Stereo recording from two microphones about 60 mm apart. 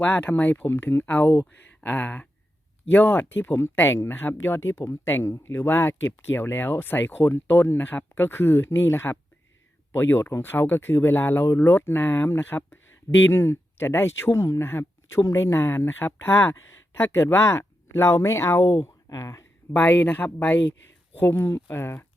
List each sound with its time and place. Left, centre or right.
0.0 s speech: left
1.8 s a sound: left
2.9 s speech: left
19.7 s speech: left
21.2 s speech: left